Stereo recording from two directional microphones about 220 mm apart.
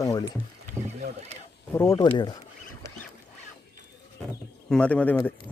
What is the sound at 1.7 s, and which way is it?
Speech, 10° left (ahead or behind).